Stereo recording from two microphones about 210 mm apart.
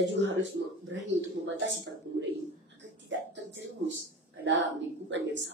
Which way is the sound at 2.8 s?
60° right (ahead or behind).